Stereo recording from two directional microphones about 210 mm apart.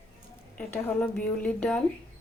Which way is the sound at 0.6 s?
10° left (ahead or behind).